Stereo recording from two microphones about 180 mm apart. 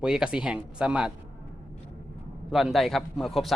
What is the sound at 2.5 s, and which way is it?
Speech, centre (ahead or behind).